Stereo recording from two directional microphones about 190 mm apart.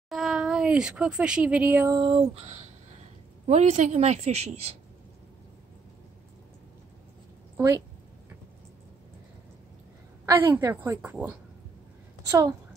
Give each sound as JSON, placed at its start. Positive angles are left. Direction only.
{"t": 0.1, "sound": "speech", "side_deg": 0}
{"t": 2.0, "sound": "a woman's voice", "side_deg": -25}
{"t": 7.5, "sound": "a woman's voice", "side_deg": -15}
{"t": 10.2, "sound": "a woman's voice", "side_deg": -15}
{"t": 12.3, "sound": "speech", "side_deg": -20}